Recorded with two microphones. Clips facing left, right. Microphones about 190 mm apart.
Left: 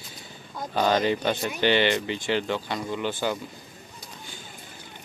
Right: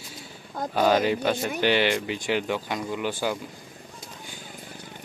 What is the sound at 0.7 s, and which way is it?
Speech, 5° right (ahead or behind).